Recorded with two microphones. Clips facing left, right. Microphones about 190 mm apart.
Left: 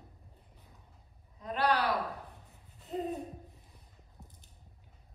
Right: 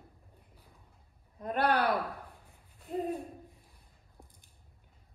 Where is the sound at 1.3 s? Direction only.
55° right (ahead or behind).